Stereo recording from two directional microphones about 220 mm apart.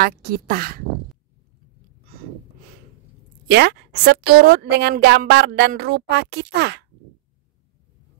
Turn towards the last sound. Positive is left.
turn(degrees=-50)  # may be behind; listen again after turning